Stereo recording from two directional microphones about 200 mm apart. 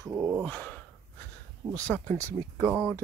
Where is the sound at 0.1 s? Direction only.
10° right (ahead or behind).